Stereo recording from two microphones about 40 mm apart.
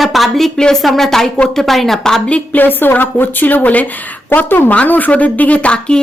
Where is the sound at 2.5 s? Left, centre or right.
Left.